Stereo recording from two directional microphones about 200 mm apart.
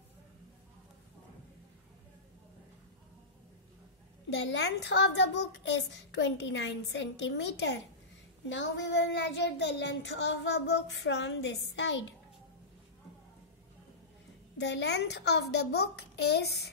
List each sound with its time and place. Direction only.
4.5 s child singing: 60° left (ahead or behind)
14.6 s child singing: 60° left (ahead or behind)